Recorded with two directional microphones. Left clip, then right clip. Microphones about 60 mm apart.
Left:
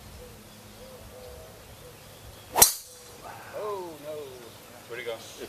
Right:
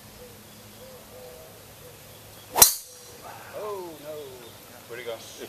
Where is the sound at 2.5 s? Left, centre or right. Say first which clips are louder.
Right 2 dB; centre.